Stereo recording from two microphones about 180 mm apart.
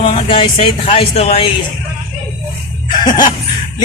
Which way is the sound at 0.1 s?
30° left (ahead or behind).